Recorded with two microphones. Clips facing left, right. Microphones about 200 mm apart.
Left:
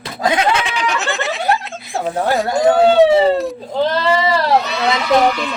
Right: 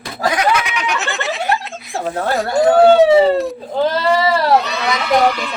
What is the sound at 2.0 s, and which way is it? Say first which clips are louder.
Speech: left 2 dB; centre (ahead or behind).